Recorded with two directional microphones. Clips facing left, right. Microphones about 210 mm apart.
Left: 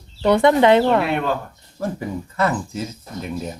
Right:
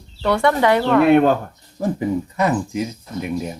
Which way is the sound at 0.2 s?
20° left (ahead or behind).